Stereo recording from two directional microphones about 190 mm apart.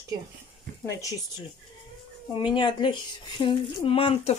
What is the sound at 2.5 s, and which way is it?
Speech, 25° left (ahead or behind).